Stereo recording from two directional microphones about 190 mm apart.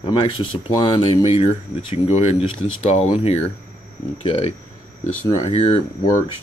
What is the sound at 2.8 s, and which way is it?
Speech, 35° left (ahead or behind).